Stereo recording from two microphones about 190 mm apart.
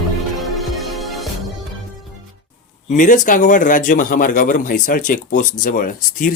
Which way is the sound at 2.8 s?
40° left (ahead or behind).